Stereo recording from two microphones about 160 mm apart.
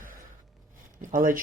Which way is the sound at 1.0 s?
55° right (ahead or behind).